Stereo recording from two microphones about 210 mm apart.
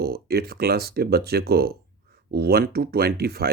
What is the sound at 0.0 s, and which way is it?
Speech, 50° right (ahead or behind).